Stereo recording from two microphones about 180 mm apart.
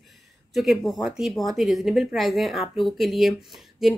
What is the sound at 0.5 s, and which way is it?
Speech, centre (ahead or behind).